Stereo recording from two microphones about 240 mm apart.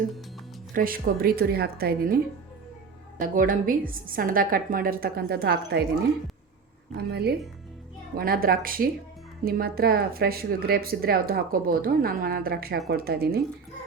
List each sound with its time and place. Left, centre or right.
0.7 s speech: right
6.9 s speech: right